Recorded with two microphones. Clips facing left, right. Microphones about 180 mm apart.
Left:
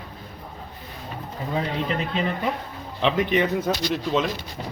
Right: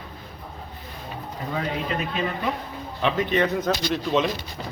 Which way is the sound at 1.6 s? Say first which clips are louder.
Left 1 dB; 30° left (ahead or behind).